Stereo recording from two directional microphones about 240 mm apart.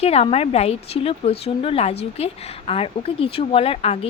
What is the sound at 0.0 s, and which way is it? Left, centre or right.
A woman's voice, left.